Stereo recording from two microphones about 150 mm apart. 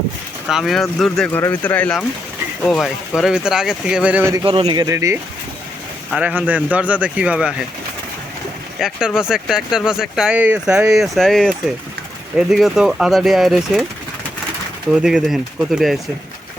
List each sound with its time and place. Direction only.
0.4 s speech: centre (ahead or behind)
4.4 s speech: 35° right (ahead or behind)
6.1 s speech: 10° right (ahead or behind)
8.8 s speech: 5° right (ahead or behind)
15.0 s speech: 5° right (ahead or behind)